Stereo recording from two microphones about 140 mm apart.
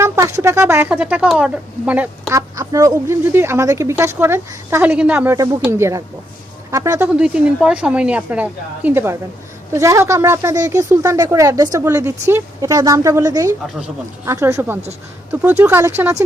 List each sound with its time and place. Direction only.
0.0 s speech: 20° right (ahead or behind)
2.3 s speech: 25° right (ahead or behind)
7.1 s speech: 10° right (ahead or behind)